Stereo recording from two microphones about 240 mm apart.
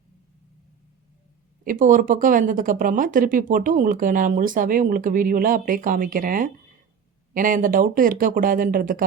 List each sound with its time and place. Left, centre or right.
1.6 s speech: right